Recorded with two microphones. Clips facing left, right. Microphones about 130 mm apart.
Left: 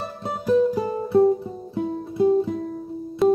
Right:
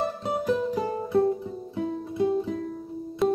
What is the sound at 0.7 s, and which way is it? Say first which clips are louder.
Music: left 5 dB; 35° left (ahead or behind).